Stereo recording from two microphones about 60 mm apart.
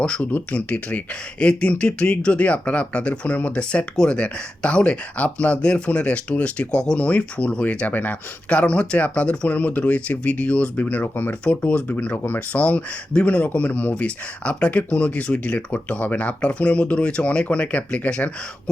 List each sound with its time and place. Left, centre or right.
0.0 s speech: left